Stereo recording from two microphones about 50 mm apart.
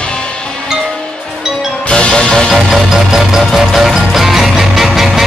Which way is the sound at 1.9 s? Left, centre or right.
Centre.